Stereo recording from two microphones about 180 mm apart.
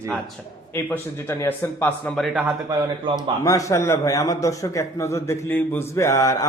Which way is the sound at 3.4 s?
20° left (ahead or behind).